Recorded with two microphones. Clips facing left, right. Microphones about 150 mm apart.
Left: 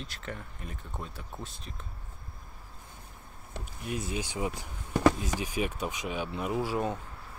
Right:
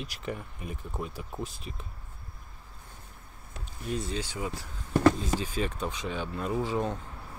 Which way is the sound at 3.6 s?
10° left (ahead or behind).